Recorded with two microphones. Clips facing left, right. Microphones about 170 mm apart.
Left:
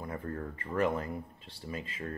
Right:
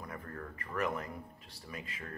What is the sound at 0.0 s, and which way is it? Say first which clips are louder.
Speech: left 6 dB; 25° left (ahead or behind).